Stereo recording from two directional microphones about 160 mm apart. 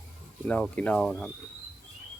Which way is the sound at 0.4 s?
10° left (ahead or behind).